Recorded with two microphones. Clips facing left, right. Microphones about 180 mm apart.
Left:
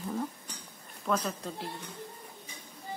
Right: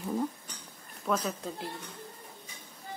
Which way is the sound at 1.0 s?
Centre (ahead or behind).